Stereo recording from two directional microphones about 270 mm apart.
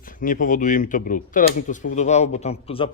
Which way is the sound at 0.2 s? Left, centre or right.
Left.